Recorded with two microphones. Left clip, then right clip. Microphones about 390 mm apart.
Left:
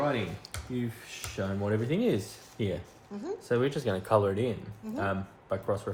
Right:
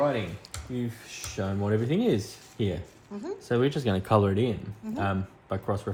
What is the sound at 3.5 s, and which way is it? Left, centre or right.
Speech, centre.